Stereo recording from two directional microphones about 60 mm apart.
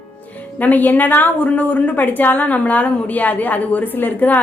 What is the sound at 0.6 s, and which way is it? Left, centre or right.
A woman's voice, left.